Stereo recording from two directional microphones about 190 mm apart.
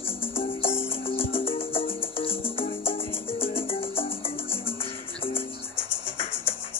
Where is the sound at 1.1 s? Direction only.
30° left (ahead or behind).